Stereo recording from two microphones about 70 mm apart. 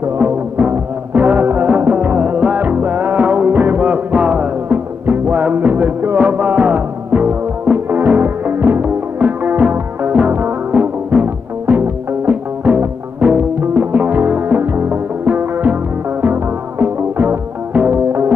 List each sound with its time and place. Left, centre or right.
0.2 s music: right